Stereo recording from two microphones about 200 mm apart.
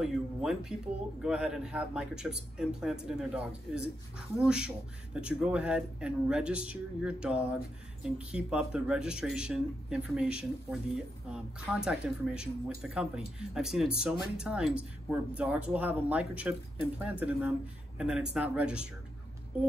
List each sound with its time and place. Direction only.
0.0 s speech: centre (ahead or behind)